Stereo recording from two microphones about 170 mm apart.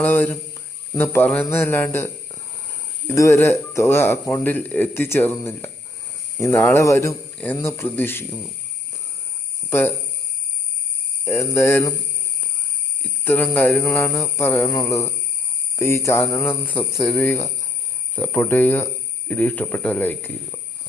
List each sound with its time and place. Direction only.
0.0 s speech: 10° left (ahead or behind)
9.6 s speech: 15° left (ahead or behind)
11.3 s speech: 15° left (ahead or behind)
13.2 s speech: 10° left (ahead or behind)